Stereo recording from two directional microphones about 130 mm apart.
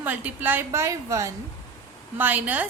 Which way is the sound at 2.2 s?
15° right (ahead or behind).